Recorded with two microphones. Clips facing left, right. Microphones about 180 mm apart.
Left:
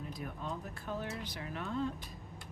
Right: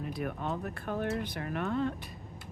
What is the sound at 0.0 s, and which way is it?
Speech, 65° right (ahead or behind).